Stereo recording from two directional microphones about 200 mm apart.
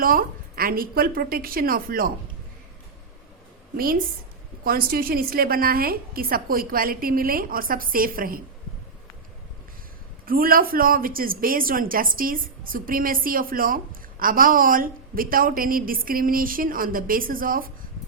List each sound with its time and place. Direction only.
0.0 s a woman's voice: 45° right (ahead or behind)
4.6 s a woman's voice: 45° right (ahead or behind)
10.2 s a woman's voice: 45° right (ahead or behind)